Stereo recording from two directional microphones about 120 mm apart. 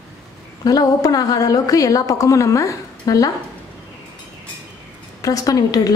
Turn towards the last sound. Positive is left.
turn(degrees=30)  # may be behind; listen again after turning